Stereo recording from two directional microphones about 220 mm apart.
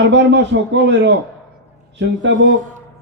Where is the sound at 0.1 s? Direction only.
55° right (ahead or behind).